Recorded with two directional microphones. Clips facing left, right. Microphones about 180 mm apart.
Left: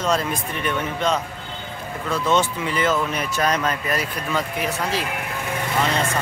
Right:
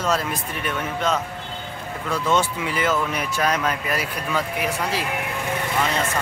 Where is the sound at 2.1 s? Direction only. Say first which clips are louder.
Left 1 dB; 10° right (ahead or behind).